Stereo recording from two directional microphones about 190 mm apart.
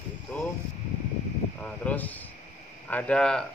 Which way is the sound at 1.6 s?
10° left (ahead or behind).